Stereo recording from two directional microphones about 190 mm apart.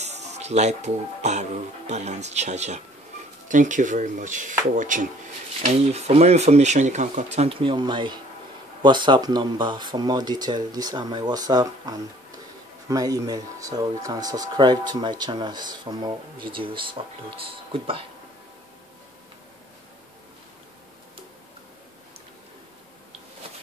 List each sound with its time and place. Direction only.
0.0 s speech: 35° right (ahead or behind)